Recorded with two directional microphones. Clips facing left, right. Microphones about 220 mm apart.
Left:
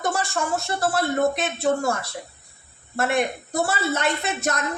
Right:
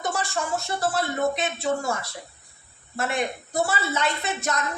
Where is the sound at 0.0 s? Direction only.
50° left (ahead or behind).